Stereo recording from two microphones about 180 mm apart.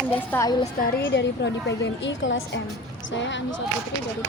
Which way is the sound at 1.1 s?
75° left (ahead or behind).